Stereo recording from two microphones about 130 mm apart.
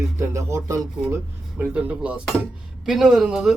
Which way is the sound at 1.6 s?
10° right (ahead or behind).